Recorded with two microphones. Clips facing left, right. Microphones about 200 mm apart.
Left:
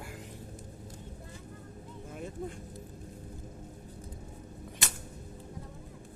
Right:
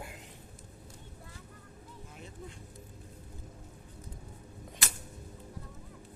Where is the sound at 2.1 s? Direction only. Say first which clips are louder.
Left 10 dB; 50° left (ahead or behind).